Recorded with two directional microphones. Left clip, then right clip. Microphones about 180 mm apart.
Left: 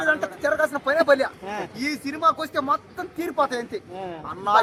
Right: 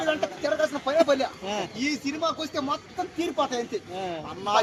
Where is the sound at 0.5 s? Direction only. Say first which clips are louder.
Left 1 dB; 25° left (ahead or behind).